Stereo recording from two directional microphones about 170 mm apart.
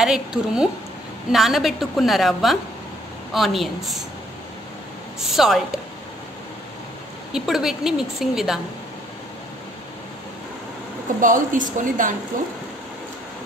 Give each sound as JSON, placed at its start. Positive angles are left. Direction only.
{"t": 0.0, "sound": "a woman's voice", "side_deg": -5}
{"t": 5.2, "sound": "speech", "side_deg": 0}
{"t": 7.3, "sound": "a woman's voice", "side_deg": 0}
{"t": 11.1, "sound": "a woman's voice", "side_deg": -50}